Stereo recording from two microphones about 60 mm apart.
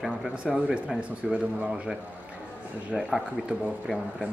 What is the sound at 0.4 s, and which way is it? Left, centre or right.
Speech, centre.